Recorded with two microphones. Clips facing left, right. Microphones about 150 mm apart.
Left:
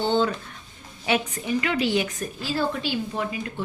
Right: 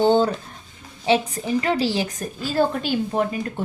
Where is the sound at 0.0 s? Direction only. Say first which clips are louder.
Right 5 dB; 40° right (ahead or behind).